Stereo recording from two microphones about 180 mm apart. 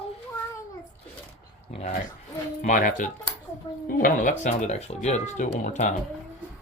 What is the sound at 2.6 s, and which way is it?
Speech, 45° left (ahead or behind).